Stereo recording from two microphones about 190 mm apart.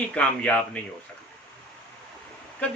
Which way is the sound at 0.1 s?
5° left (ahead or behind).